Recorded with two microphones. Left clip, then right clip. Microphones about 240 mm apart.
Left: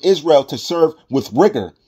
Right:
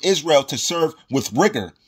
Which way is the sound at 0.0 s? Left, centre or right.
Right.